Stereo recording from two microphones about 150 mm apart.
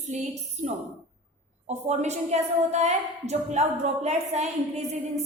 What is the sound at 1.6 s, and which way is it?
A woman's voice, 50° right (ahead or behind).